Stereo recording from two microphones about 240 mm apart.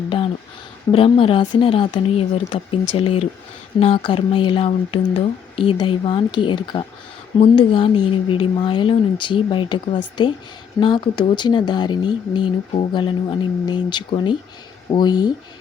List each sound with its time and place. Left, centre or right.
0.9 s speech: left